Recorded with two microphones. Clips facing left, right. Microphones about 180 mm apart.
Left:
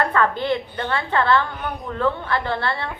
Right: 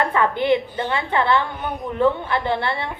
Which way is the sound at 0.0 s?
15° right (ahead or behind).